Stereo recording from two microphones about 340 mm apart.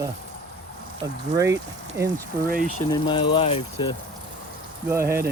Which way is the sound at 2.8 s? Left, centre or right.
Centre.